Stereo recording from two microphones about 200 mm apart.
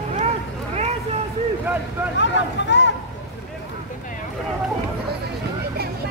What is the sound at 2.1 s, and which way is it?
Speech, 65° left (ahead or behind).